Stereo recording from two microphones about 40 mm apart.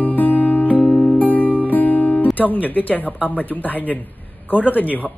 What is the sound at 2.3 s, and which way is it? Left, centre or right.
Speech, left.